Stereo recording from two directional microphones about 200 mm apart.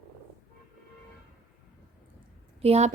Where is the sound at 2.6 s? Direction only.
30° right (ahead or behind).